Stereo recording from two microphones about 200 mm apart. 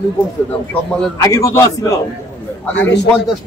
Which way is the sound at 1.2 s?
15° left (ahead or behind).